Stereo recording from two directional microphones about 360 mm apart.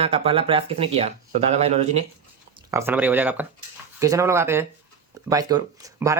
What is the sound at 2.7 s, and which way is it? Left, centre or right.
Speech, centre.